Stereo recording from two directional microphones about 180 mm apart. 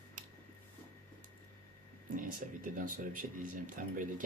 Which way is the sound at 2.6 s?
50° right (ahead or behind).